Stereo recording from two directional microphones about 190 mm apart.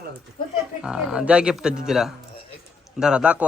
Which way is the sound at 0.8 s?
5° right (ahead or behind).